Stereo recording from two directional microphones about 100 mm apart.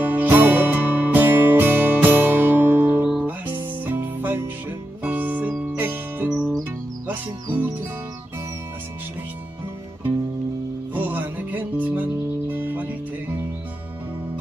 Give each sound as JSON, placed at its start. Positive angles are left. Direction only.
{"t": 0.0, "sound": "music", "side_deg": -20}
{"t": 3.1, "sound": "guitar", "side_deg": -10}
{"t": 3.8, "sound": "music", "side_deg": -20}
{"t": 10.9, "sound": "music", "side_deg": -20}